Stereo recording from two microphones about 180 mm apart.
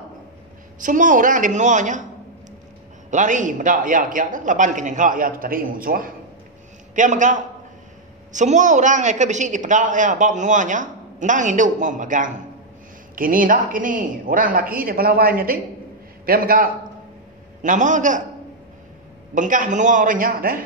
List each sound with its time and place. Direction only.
0.8 s a woman's voice: 45° right (ahead or behind)
3.1 s a woman's voice: 45° right (ahead or behind)
19.3 s a woman's voice: 45° right (ahead or behind)